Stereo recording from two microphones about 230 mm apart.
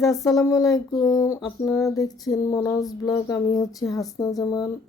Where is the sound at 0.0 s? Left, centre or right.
Centre.